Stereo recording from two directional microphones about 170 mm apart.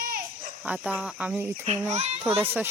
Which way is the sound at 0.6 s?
10° right (ahead or behind).